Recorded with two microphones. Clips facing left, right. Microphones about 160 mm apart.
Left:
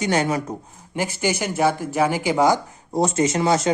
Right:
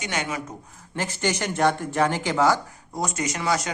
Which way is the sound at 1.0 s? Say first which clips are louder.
Left 3 dB; 10° left (ahead or behind).